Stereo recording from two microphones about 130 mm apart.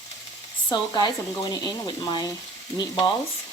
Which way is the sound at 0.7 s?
35° left (ahead or behind).